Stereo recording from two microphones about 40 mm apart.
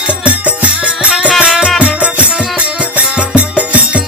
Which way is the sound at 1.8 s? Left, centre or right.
Right.